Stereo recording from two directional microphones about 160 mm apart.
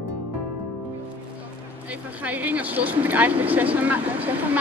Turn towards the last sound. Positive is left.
turn(degrees=-10)  # may be behind; listen again after turning